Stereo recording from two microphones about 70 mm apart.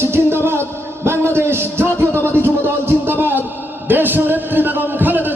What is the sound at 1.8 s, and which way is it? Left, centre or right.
Music, left.